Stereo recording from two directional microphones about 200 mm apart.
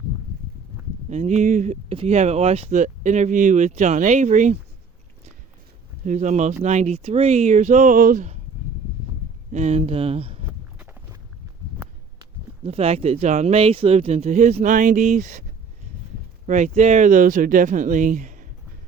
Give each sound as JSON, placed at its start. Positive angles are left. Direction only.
{"t": 1.1, "sound": "speech", "side_deg": -35}
{"t": 6.1, "sound": "speech", "side_deg": -35}
{"t": 9.5, "sound": "speech", "side_deg": -35}
{"t": 10.8, "sound": "walk", "side_deg": -10}
{"t": 12.6, "sound": "speech", "side_deg": -30}
{"t": 16.5, "sound": "speech", "side_deg": -35}